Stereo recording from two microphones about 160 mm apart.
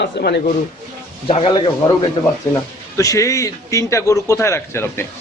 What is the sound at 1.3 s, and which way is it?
Speech, 35° left (ahead or behind).